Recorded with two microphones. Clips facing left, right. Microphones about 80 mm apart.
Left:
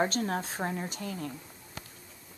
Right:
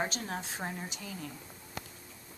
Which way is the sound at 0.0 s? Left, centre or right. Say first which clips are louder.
Left 6 dB; left.